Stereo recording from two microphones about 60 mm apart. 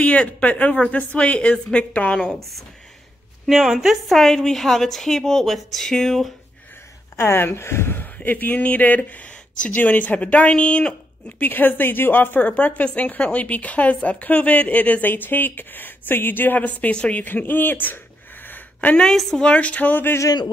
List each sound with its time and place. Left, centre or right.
0.0 s speech: left
3.4 s a woman's voice: centre
7.2 s speech: left; by 11.0 s centre
11.3 s speech: left
16.9 s speech: centre
17.2 s a sound: left
18.9 s a woman's voice: centre
19.4 s speech: left